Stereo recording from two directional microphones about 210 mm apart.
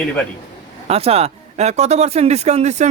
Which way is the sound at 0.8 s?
30° right (ahead or behind).